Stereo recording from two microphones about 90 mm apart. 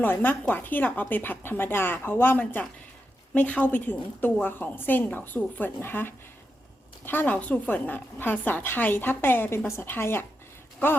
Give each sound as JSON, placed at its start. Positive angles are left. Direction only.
{"t": 0.0, "sound": "a woman's voice", "side_deg": 20}